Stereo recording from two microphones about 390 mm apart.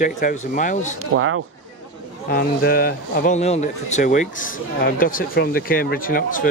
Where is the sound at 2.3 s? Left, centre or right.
Left.